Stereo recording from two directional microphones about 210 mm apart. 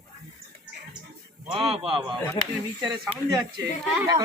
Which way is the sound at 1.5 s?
25° right (ahead or behind).